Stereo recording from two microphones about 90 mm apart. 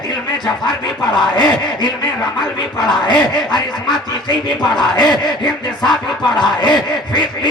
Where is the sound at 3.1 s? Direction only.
55° left (ahead or behind).